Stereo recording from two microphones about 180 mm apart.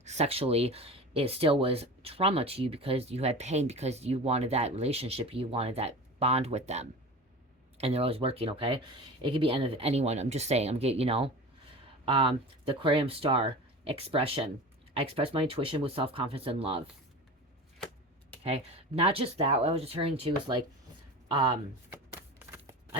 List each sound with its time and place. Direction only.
0.0 s speech: 40° right (ahead or behind)
18.4 s speech: 35° right (ahead or behind)
22.1 s shuffling cards: 10° right (ahead or behind)